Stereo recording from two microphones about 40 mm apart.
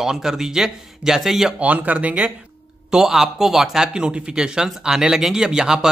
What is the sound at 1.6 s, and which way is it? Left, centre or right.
Speech, right.